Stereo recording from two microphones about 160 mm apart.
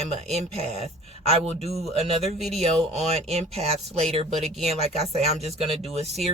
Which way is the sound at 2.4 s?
Centre (ahead or behind).